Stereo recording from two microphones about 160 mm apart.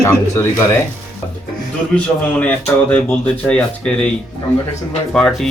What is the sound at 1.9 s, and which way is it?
Speech, 10° left (ahead or behind).